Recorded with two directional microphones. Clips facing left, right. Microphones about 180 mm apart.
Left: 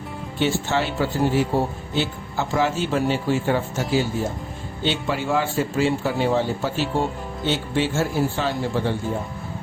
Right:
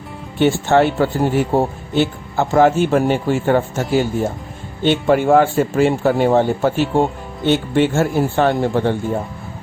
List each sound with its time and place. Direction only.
0.3 s speech: 55° right (ahead or behind)